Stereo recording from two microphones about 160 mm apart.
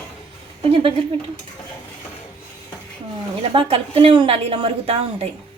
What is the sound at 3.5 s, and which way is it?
A woman's voice, 40° right (ahead or behind).